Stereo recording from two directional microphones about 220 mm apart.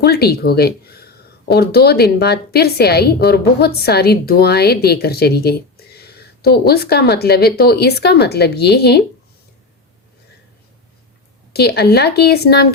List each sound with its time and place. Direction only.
0.0 s speech: 45° left (ahead or behind)
11.5 s speech: 45° left (ahead or behind)